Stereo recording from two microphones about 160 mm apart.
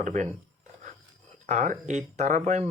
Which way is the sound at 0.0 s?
50° right (ahead or behind).